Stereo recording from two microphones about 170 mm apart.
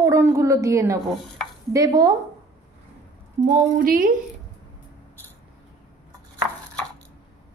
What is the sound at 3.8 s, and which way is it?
Speech, 55° right (ahead or behind).